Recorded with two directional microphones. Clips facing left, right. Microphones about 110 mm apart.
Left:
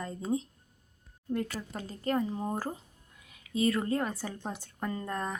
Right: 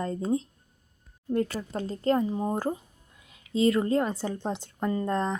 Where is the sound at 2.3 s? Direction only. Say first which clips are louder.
Right 6 dB; 20° right (ahead or behind).